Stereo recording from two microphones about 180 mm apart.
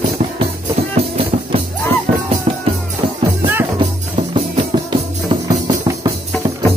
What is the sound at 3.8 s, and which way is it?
Music, 30° right (ahead or behind).